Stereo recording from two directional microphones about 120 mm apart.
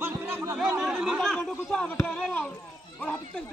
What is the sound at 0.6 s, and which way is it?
Speech, 5° right (ahead or behind).